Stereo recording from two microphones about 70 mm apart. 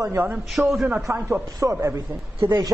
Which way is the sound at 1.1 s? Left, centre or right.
Right.